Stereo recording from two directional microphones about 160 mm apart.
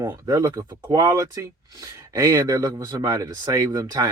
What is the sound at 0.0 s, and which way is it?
Speech, 20° right (ahead or behind).